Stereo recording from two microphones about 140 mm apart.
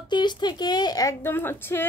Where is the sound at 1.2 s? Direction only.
15° left (ahead or behind).